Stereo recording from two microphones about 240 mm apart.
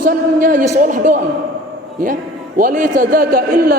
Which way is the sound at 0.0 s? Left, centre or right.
Right.